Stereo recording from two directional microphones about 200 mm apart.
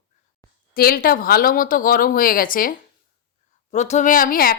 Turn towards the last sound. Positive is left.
turn(degrees=45)  # may be behind; listen again after turning